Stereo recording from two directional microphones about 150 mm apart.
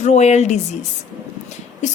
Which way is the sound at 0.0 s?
50° left (ahead or behind).